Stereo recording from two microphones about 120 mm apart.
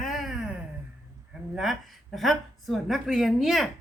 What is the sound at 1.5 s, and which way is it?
Speech, centre (ahead or behind).